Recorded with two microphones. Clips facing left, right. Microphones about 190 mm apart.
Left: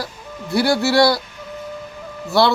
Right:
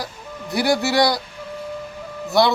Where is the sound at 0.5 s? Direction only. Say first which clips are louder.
Left 3 dB; 20° right (ahead or behind).